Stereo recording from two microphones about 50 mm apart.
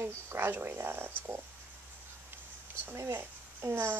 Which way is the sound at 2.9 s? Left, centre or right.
Right.